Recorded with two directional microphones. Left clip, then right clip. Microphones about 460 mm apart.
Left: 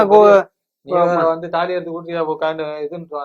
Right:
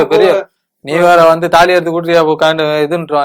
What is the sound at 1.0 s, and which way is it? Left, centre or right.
Speech, right.